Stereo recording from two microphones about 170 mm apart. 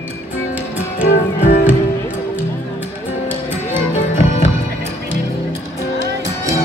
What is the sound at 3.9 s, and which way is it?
Music, 45° left (ahead or behind).